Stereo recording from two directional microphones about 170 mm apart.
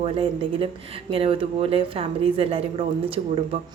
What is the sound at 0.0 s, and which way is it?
Speech, 35° right (ahead or behind).